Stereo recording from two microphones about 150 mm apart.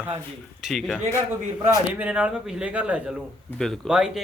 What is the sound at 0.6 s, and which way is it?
A man's voice, centre (ahead or behind).